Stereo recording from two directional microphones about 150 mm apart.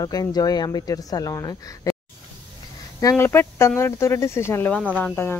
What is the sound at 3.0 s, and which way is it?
Speech, 20° left (ahead or behind).